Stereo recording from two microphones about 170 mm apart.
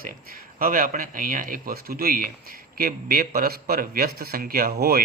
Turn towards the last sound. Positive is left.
turn(degrees=-65)  # may be behind; listen again after turning